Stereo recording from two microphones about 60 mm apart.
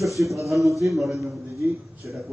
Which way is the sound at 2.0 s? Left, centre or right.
Right.